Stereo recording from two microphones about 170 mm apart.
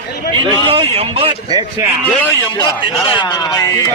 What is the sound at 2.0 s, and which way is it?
Speech, 10° left (ahead or behind).